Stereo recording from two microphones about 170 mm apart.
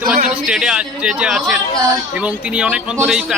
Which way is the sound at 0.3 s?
5° right (ahead or behind).